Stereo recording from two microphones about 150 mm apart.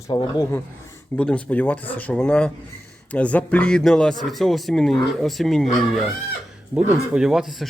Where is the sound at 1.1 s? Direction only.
10° left (ahead or behind).